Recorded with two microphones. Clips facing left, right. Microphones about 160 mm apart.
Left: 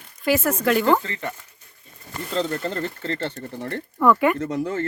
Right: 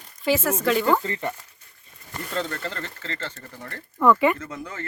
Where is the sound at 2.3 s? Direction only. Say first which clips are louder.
Left 5 dB; 30° left (ahead or behind).